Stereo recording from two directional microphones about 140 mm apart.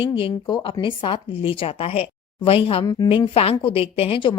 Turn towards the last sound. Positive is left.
turn(degrees=35)  # may be behind; listen again after turning